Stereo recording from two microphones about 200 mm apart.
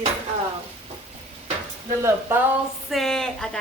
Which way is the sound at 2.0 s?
10° right (ahead or behind).